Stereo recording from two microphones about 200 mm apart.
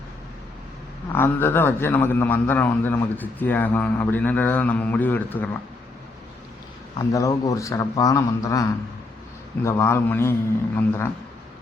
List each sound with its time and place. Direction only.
1.1 s a man's voice: 10° left (ahead or behind)
7.1 s a man's voice: 15° left (ahead or behind)
9.6 s a man's voice: 15° left (ahead or behind)